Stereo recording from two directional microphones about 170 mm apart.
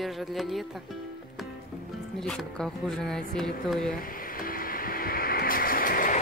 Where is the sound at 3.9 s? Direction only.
55° left (ahead or behind).